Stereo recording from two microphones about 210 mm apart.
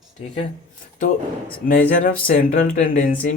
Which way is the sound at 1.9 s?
45° left (ahead or behind).